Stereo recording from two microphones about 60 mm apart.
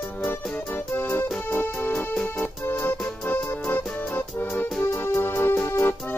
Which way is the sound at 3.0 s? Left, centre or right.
Centre.